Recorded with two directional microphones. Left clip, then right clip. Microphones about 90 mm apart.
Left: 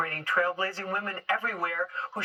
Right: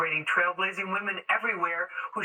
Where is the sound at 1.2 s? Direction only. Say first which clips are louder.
Right 2 dB; 15° left (ahead or behind).